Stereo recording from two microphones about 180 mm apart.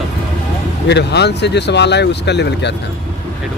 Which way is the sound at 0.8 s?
70° left (ahead or behind).